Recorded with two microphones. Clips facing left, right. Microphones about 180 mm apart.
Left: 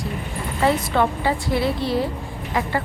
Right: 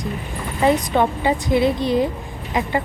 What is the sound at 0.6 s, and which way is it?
A woman's voice, 15° right (ahead or behind).